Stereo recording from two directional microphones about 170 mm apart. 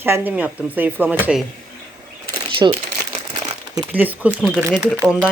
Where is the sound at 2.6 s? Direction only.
25° right (ahead or behind).